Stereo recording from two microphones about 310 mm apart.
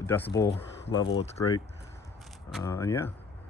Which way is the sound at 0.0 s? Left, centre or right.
Centre.